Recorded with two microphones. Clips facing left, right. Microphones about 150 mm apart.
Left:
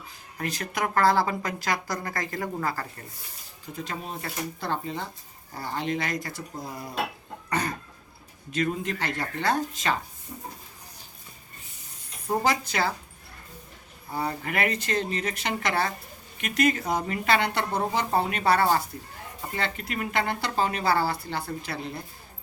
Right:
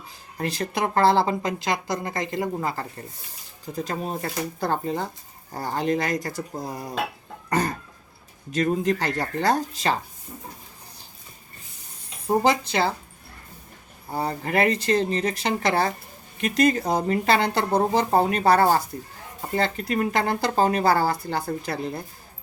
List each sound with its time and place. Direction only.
0.3 s speech: 30° right (ahead or behind)
3.8 s speech: 40° right (ahead or behind)
8.5 s speech: 35° right (ahead or behind)
12.3 s speech: 25° right (ahead or behind)
14.1 s speech: 35° right (ahead or behind)